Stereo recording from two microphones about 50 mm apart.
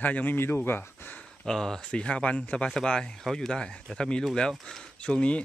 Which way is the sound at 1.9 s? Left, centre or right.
Left.